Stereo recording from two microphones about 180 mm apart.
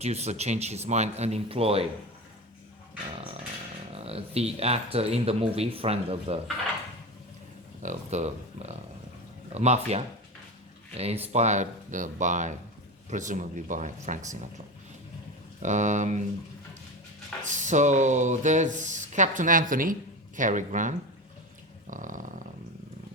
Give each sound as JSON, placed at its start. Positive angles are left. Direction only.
{"t": 0.0, "sound": "speech", "side_deg": -35}
{"t": 3.9, "sound": "speech", "side_deg": -35}
{"t": 7.8, "sound": "speech", "side_deg": -40}
{"t": 15.6, "sound": "speech", "side_deg": -40}
{"t": 17.4, "sound": "speech", "side_deg": -45}